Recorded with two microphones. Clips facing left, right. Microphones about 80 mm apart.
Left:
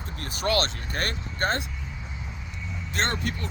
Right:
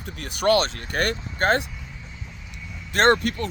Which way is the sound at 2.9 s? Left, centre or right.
Right.